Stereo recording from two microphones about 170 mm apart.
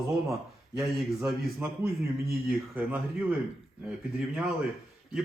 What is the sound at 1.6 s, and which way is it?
A man's voice, 15° right (ahead or behind).